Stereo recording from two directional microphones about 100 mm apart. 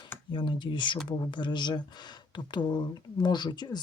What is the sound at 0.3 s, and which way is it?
Speech, 50° left (ahead or behind).